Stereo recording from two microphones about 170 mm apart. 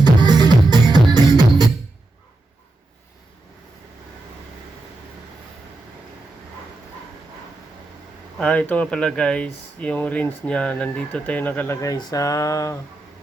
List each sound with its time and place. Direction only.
0.0 s music: 25° right (ahead or behind)
8.4 s speech: 5° left (ahead or behind)